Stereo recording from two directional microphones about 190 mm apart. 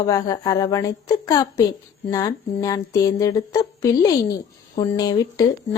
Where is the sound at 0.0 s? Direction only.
20° left (ahead or behind).